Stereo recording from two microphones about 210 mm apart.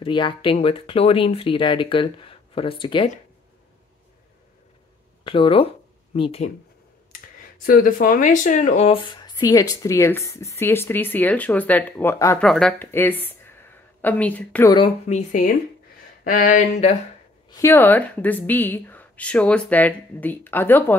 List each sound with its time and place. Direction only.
0.0 s speech: 20° left (ahead or behind)
5.2 s speech: 25° left (ahead or behind)
7.1 s speech: 40° left (ahead or behind); by 14.7 s 5° left (ahead or behind)
15.0 s speech: 35° left (ahead or behind)
17.5 s speech: 15° left (ahead or behind)